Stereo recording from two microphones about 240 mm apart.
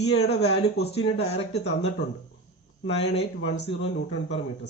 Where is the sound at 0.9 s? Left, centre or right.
Left.